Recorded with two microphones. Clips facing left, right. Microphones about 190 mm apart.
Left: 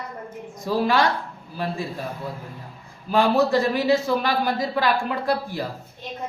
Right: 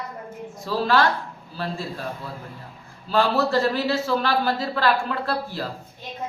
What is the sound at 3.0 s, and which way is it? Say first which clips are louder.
A man's voice: left 2 dB; 15° left (ahead or behind).